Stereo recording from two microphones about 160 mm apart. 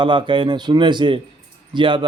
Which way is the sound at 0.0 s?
30° right (ahead or behind).